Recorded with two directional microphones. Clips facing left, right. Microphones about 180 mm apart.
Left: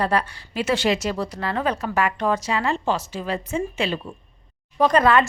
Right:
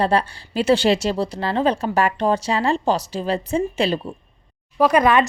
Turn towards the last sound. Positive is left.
turn(degrees=-15)  # may be behind; listen again after turning